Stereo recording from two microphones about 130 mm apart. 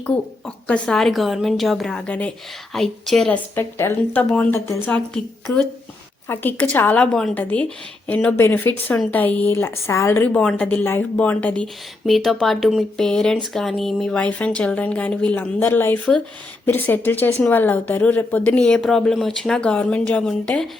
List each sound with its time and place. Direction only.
0.0 s a woman's voice: 10° left (ahead or behind)
3.5 s a woman's voice: 15° left (ahead or behind)